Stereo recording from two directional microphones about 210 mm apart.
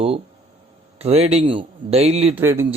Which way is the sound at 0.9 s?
30° right (ahead or behind).